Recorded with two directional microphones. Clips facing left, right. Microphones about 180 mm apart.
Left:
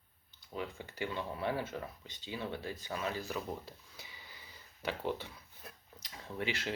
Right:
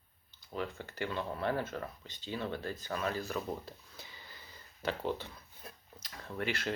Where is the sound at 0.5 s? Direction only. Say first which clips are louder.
Right 2 dB; 15° left (ahead or behind).